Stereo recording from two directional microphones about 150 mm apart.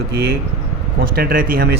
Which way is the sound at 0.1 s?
90° right.